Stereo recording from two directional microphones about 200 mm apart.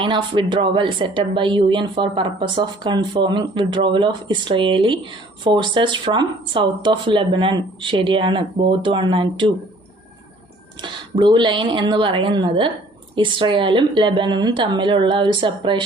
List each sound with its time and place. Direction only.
0.0 s a woman's voice: 25° right (ahead or behind)
10.8 s a woman's voice: 25° right (ahead or behind)